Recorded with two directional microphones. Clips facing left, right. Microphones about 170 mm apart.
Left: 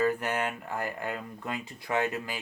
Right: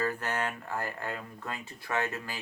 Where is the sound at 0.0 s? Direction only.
15° left (ahead or behind).